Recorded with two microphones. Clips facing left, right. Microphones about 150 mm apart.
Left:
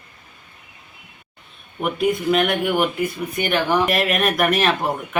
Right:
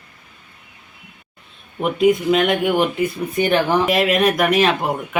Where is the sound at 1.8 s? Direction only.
20° right (ahead or behind).